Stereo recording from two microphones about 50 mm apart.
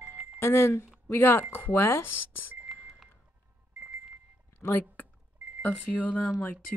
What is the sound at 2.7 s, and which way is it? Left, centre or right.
Vehicle, centre.